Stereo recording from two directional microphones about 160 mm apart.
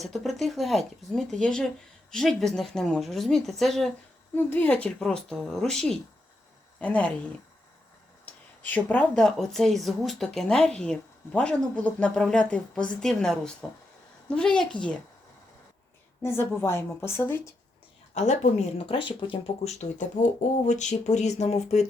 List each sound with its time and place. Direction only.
0.0 s speech: centre (ahead or behind)
4.4 s speech: 10° left (ahead or behind)
8.2 s speech: 10° left (ahead or behind)
16.2 s a woman's voice: 15° left (ahead or behind)
18.1 s speech: 45° left (ahead or behind)
19.8 s speech: 50° left (ahead or behind)